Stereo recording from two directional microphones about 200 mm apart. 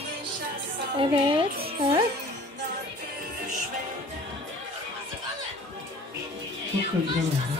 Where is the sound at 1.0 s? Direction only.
25° right (ahead or behind).